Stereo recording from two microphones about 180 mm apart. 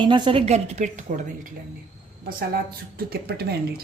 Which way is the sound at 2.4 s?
55° right (ahead or behind).